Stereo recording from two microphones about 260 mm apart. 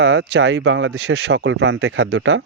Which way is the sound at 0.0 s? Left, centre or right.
Right.